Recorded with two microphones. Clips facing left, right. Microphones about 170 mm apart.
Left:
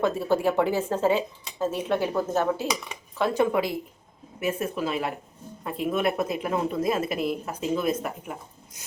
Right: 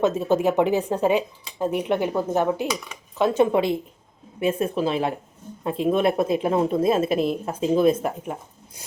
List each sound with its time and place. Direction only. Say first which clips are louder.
0.0 s a woman's voice: right 3 dB; 20° right (ahead or behind)